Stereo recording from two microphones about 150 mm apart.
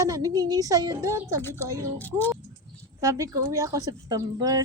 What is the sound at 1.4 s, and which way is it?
Speech, 15° left (ahead or behind).